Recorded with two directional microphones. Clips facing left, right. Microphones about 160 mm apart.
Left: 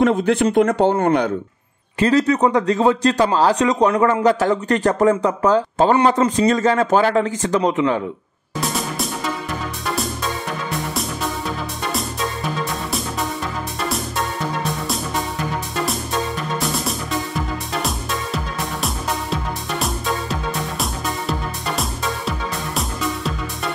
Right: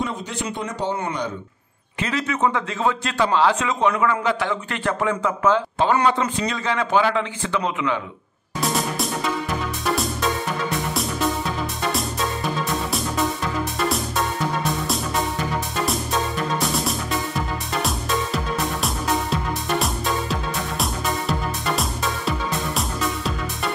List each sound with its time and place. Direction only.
0.0 s speech: 60° left (ahead or behind)
2.0 s speech: 35° left (ahead or behind)
8.5 s music: centre (ahead or behind)
13.8 s music: centre (ahead or behind)
16.5 s music: centre (ahead or behind)